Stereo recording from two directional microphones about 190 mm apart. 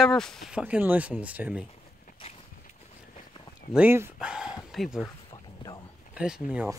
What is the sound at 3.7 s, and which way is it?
Speech, 10° right (ahead or behind).